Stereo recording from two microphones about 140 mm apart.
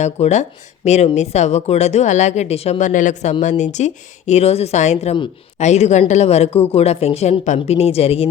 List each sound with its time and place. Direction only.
0.0 s a woman's voice: 55° left (ahead or behind)